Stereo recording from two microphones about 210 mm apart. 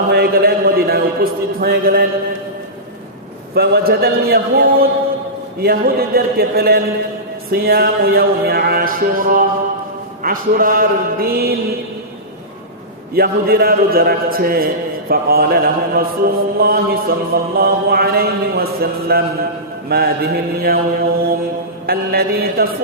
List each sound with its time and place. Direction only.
0.1 s a sound: 50° right (ahead or behind)
3.5 s mantra: 50° right (ahead or behind)
13.1 s mantra: 45° right (ahead or behind)